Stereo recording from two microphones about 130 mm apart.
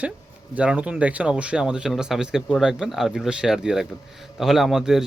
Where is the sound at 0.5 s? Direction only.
10° right (ahead or behind).